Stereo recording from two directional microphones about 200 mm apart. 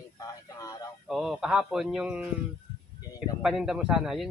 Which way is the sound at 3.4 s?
Centre (ahead or behind).